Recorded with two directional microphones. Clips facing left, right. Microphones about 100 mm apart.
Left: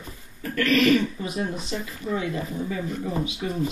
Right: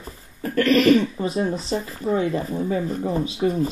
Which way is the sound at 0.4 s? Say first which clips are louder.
Right 4 dB; 35° right (ahead or behind).